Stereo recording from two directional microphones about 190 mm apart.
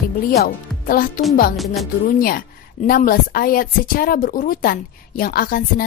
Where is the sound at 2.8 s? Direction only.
50° left (ahead or behind).